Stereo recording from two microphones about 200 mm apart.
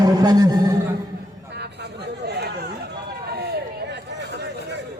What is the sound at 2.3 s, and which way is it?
Chatter, 55° right (ahead or behind).